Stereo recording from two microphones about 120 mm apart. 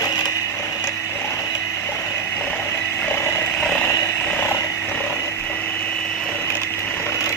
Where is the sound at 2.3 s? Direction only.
15° left (ahead or behind).